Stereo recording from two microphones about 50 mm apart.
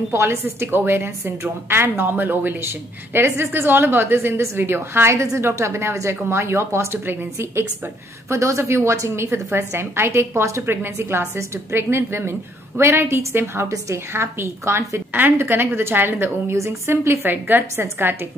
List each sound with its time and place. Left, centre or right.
0.1 s a woman's voice: right
8.3 s a woman's voice: right
15.3 s a woman's voice: right
16.5 s a woman's voice: right
16.9 s a woman's voice: right